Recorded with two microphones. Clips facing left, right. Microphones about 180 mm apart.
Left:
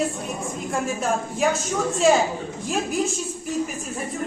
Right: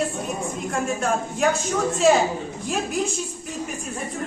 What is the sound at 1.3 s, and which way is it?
A woman's voice, centre (ahead or behind).